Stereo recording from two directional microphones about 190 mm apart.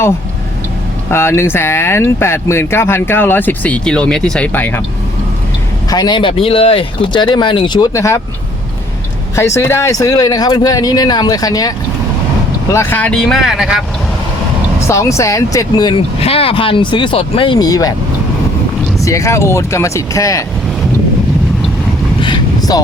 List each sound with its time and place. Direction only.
1.1 s speech: 15° left (ahead or behind)
5.9 s speech: 20° left (ahead or behind)
9.3 s speech: 15° left (ahead or behind)
12.7 s speech: 10° left (ahead or behind)
14.8 s speech: 15° left (ahead or behind)
19.0 s speech: 15° left (ahead or behind)
22.2 s boat: 20° left (ahead or behind)